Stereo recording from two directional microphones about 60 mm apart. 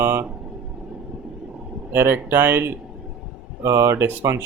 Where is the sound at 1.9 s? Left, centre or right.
Right.